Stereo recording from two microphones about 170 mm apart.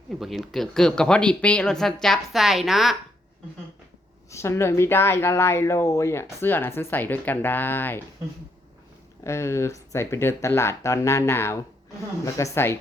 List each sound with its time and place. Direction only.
0.1 s speech: centre (ahead or behind)
4.3 s speech: 15° left (ahead or behind)
9.2 s speech: 15° left (ahead or behind)